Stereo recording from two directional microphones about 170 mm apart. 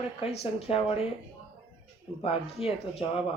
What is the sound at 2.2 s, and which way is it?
Speech, 35° left (ahead or behind).